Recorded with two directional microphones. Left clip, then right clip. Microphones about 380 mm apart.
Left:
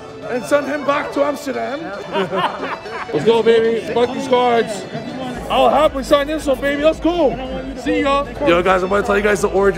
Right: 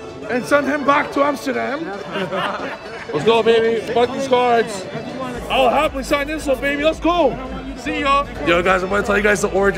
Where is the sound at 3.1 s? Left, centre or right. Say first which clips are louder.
Left 1 dB; centre.